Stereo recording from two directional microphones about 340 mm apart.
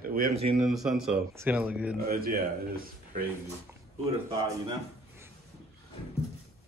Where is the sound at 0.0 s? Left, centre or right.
Right.